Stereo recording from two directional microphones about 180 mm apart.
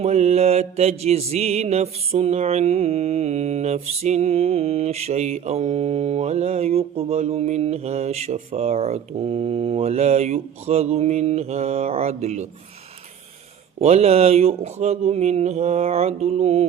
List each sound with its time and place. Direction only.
0.0 s mantra: 35° right (ahead or behind)
13.7 s mantra: 35° right (ahead or behind)